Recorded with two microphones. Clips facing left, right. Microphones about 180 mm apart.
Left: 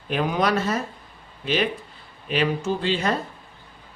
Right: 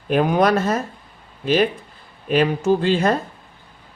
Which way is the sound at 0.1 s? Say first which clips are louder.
Right 6 dB; 50° right (ahead or behind).